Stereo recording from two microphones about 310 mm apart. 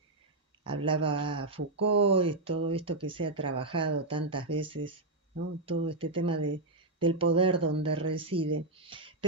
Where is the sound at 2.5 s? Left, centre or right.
Right.